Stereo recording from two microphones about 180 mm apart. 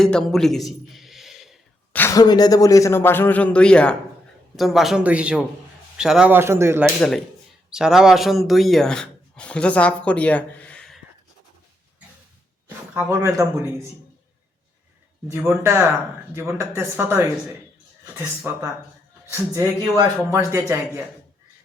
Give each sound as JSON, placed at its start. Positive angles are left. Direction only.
{"t": 0.0, "sound": "a sound", "side_deg": 5}
{"t": 2.0, "sound": "a man's voice", "side_deg": 15}
{"t": 12.6, "sound": "speech", "side_deg": -10}
{"t": 15.3, "sound": "speech", "side_deg": -15}